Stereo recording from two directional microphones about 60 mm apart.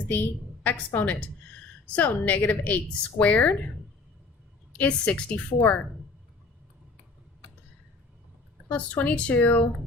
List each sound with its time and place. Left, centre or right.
0.1 s a woman's voice: left
4.8 s a woman's voice: left
8.7 s a woman's voice: left